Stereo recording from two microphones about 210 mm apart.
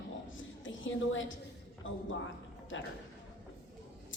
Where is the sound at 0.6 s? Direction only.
65° left (ahead or behind).